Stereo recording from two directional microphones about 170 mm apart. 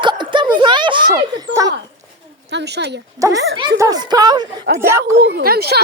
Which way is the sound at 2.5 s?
85° right.